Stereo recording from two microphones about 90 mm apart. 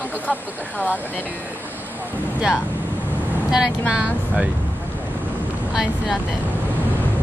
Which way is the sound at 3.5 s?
10° right (ahead or behind).